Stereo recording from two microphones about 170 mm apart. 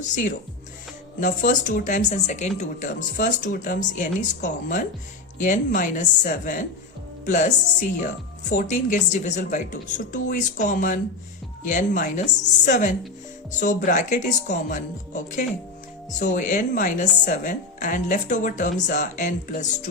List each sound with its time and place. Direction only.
1.2 s a woman's voice: 50° left (ahead or behind)